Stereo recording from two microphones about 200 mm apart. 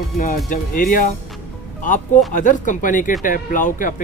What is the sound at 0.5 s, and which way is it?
Speech, 40° left (ahead or behind).